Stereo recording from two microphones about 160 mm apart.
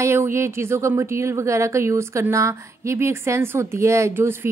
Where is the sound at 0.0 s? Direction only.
15° right (ahead or behind).